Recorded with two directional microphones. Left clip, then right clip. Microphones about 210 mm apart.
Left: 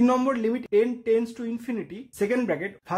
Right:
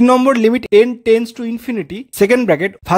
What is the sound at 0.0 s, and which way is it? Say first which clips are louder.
Speech: right 12 dB; 40° right (ahead or behind).